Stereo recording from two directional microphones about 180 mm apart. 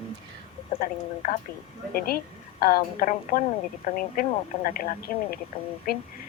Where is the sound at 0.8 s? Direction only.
45° left (ahead or behind).